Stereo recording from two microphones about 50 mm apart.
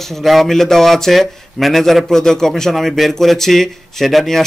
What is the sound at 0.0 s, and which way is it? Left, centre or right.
Speech, centre.